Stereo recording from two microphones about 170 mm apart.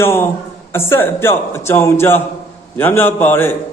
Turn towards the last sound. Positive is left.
turn(degrees=15)  # may be behind; listen again after turning